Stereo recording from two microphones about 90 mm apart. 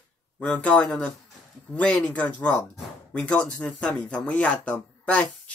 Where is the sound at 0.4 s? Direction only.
15° left (ahead or behind).